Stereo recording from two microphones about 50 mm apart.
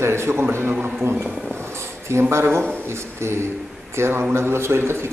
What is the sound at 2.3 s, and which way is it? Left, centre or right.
Speech, right.